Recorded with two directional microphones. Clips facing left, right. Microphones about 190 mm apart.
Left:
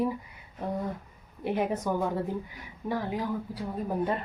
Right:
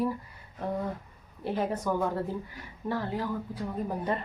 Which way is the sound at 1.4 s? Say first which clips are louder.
Left 2 dB; 15° left (ahead or behind).